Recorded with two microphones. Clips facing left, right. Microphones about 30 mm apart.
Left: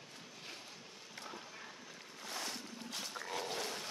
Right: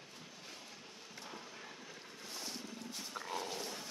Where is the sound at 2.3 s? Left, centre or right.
Left.